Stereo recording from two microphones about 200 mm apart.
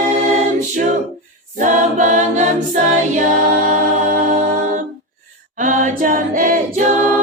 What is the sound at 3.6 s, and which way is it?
Music, 40° right (ahead or behind).